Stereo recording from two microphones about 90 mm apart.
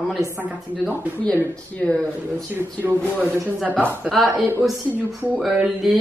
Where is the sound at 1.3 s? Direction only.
15° left (ahead or behind).